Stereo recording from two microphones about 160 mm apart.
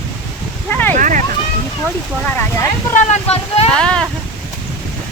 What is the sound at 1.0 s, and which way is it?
Speech, 55° right (ahead or behind).